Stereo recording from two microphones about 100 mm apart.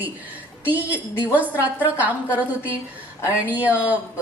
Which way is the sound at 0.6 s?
15° right (ahead or behind).